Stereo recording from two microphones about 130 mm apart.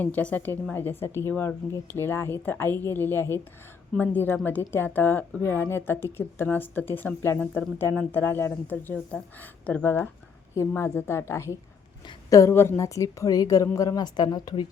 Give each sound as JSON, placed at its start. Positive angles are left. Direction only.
{"t": 0.0, "sound": "a woman's voice", "side_deg": 10}